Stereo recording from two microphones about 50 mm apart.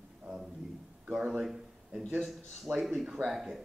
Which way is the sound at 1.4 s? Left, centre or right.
Centre.